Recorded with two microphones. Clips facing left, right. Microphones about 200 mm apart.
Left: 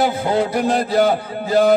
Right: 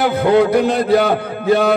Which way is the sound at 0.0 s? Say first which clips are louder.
Right 5 dB; 65° right (ahead or behind).